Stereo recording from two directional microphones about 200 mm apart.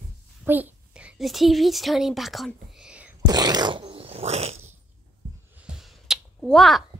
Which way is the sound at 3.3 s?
20° right (ahead or behind).